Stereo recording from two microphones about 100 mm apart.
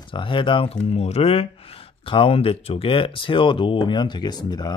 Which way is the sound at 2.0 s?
65° left (ahead or behind).